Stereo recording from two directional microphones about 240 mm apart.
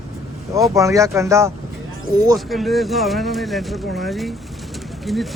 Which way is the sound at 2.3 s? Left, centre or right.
Centre.